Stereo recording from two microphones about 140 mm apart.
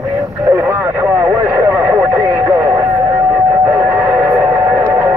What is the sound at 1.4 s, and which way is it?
Vehicle, 25° right (ahead or behind).